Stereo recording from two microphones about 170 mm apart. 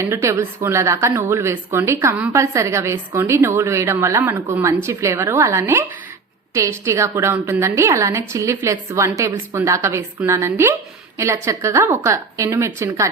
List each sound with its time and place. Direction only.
0.0 s a woman's voice: 15° right (ahead or behind)